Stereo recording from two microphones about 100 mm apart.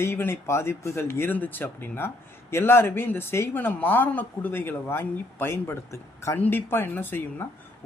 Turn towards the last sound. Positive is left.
turn(degrees=20)  # may be behind; listen again after turning